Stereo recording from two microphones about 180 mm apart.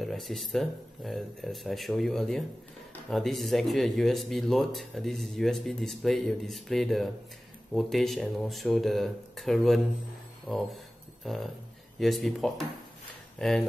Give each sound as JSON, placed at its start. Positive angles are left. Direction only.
{"t": 0.0, "sound": "speech", "side_deg": 0}